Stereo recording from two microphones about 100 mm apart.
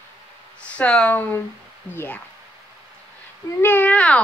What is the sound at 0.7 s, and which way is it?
Speech, 10° left (ahead or behind).